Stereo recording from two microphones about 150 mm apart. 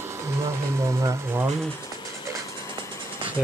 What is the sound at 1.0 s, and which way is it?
Speech, 20° right (ahead or behind).